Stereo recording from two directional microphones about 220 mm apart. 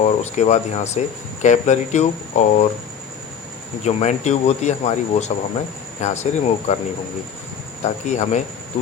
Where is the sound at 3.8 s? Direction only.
30° left (ahead or behind).